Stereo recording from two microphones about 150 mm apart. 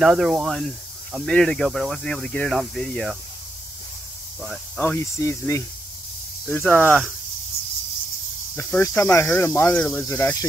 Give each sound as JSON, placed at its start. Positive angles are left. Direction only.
{"t": 0.0, "sound": "speech", "side_deg": -5}
{"t": 4.7, "sound": "speech", "side_deg": 15}
{"t": 8.5, "sound": "speech", "side_deg": 15}